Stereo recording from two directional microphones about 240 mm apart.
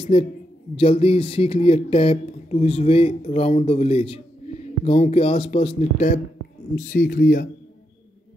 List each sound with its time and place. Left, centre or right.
0.0 s speech: left